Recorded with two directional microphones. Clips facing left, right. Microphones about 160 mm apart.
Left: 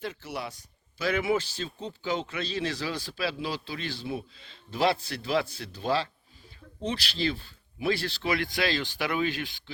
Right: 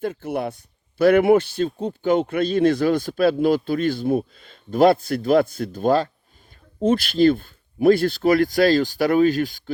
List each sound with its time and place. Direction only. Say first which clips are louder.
0.0 s a man's voice: right 10 dB; 50° right (ahead or behind)